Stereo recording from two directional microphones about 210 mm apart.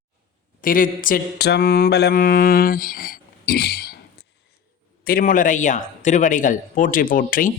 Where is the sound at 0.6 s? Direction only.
40° left (ahead or behind).